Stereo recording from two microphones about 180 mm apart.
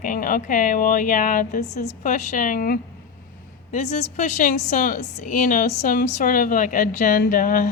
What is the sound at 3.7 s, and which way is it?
Speech, 40° left (ahead or behind).